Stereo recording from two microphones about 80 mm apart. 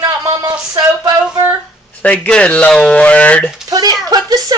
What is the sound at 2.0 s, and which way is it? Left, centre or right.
Speech, centre.